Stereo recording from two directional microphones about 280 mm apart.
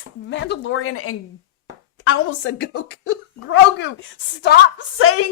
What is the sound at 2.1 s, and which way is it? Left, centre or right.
Speech, left.